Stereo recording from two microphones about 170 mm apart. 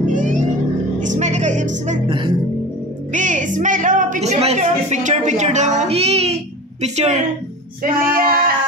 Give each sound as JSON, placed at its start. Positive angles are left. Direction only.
{"t": 0.1, "sound": "a sound", "side_deg": -50}
{"t": 1.0, "sound": "music", "side_deg": -45}
{"t": 2.0, "sound": "speech", "side_deg": -30}
{"t": 3.1, "sound": "a woman's voice", "side_deg": -45}
{"t": 7.8, "sound": "female singing", "side_deg": -60}